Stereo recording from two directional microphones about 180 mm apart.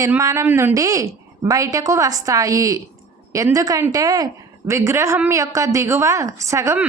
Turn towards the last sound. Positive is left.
turn(degrees=-15)  # may be behind; listen again after turning